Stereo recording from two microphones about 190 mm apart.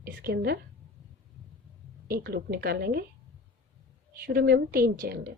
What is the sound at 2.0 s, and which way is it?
Speech, 55° right (ahead or behind).